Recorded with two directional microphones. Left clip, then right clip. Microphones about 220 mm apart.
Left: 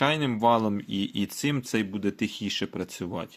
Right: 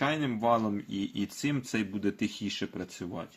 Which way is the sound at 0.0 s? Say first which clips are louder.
Left 6 dB; 50° left (ahead or behind).